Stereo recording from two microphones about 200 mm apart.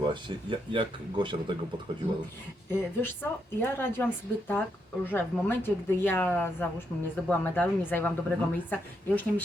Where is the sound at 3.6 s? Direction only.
10° left (ahead or behind).